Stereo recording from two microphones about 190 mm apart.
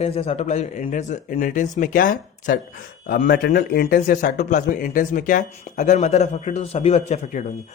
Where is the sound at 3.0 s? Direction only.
55° left (ahead or behind); by 7.4 s 35° left (ahead or behind).